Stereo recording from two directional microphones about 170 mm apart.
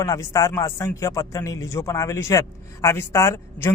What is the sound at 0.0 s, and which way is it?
A man's voice, 20° left (ahead or behind).